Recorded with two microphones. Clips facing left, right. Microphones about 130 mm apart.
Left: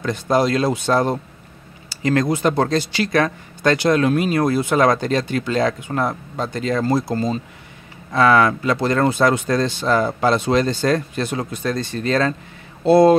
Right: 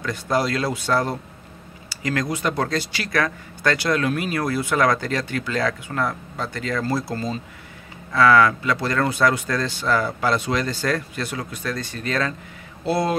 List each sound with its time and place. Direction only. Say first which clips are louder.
0.0 s speech: left 5 dB; 20° left (ahead or behind)